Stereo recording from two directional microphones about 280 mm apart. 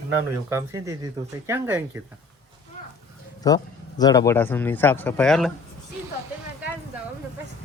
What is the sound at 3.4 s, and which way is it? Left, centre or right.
A man's voice, centre.